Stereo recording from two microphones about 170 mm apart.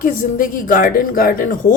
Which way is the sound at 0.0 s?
50° left (ahead or behind).